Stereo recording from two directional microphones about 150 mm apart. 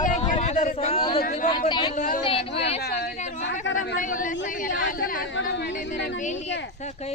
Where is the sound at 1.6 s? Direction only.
30° left (ahead or behind).